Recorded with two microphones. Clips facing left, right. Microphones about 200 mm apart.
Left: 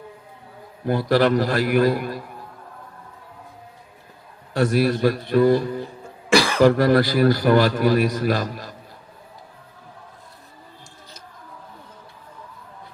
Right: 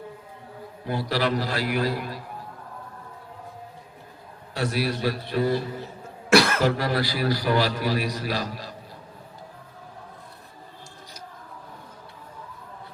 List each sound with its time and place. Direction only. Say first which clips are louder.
0.9 s a man's voice: left 7 dB; 50° left (ahead or behind)
4.5 s a man's voice: left 7 dB; 50° left (ahead or behind)
6.3 s cough: even; 5° right (ahead or behind)
6.6 s a man's voice: left 8 dB; 50° left (ahead or behind)